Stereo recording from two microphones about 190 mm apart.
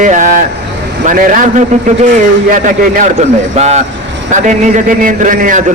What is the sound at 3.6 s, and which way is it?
A man's voice, 35° right (ahead or behind).